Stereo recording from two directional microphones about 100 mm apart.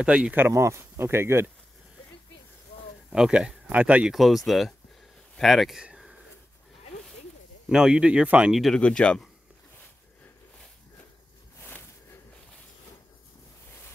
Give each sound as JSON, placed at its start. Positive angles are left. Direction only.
{"t": 0.0, "sound": "speech", "side_deg": -10}
{"t": 0.5, "sound": "speech", "side_deg": -30}
{"t": 3.1, "sound": "speech", "side_deg": -10}
{"t": 4.1, "sound": "speech", "side_deg": 0}
{"t": 5.3, "sound": "a sound", "side_deg": 0}
{"t": 7.7, "sound": "speech", "side_deg": -5}
{"t": 8.7, "sound": "speech", "side_deg": 10}
{"t": 11.6, "sound": "a sound", "side_deg": 25}